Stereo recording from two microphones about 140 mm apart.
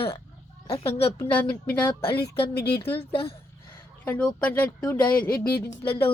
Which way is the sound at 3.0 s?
45° left (ahead or behind).